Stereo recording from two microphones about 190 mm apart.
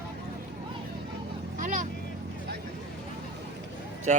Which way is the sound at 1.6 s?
45° right (ahead or behind).